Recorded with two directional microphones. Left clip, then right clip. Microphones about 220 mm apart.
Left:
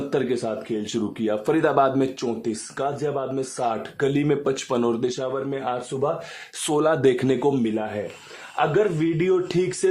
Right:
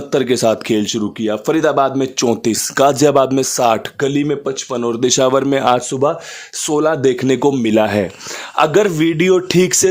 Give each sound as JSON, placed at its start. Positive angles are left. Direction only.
{"t": 0.1, "sound": "speech", "side_deg": -35}
{"t": 4.0, "sound": "speech", "side_deg": -25}
{"t": 4.9, "sound": "speech", "side_deg": -35}
{"t": 6.6, "sound": "speech", "side_deg": -20}
{"t": 7.7, "sound": "speech", "side_deg": -50}
{"t": 9.0, "sound": "speech", "side_deg": -35}